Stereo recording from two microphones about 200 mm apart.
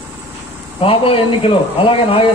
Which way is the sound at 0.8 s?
25° left (ahead or behind).